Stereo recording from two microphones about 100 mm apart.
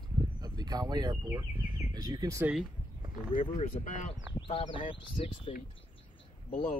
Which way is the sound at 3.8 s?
70° left (ahead or behind).